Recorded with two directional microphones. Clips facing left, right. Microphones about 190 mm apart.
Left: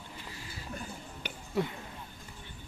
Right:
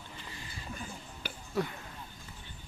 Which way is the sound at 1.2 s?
20° left (ahead or behind).